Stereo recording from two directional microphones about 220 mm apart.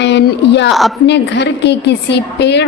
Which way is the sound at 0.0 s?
50° left (ahead or behind).